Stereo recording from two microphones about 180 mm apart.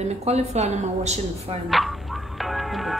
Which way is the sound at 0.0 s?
35° right (ahead or behind).